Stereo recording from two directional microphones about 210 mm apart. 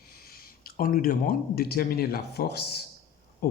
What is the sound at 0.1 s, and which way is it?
Speech, 45° left (ahead or behind).